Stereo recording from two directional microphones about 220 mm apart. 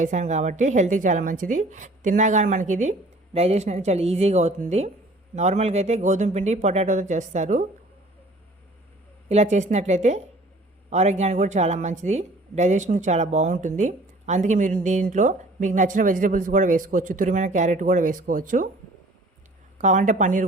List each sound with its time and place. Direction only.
0.0 s a woman's voice: 35° right (ahead or behind)
9.3 s a woman's voice: 30° right (ahead or behind)
19.8 s a woman's voice: 35° right (ahead or behind)